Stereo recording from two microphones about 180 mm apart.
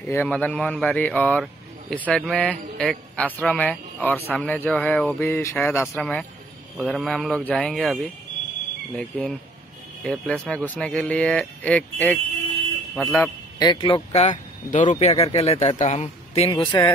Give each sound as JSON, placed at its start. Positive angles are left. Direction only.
{"t": 0.1, "sound": "speech", "side_deg": 10}
{"t": 13.1, "sound": "speech", "side_deg": 20}
{"t": 14.2, "sound": "a man's voice", "side_deg": 40}
{"t": 16.5, "sound": "speech", "side_deg": 20}